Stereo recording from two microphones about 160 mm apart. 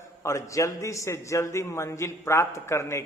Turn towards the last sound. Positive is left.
turn(degrees=15)  # may be behind; listen again after turning